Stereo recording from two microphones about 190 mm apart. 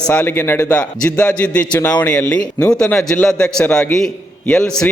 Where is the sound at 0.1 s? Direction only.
10° left (ahead or behind).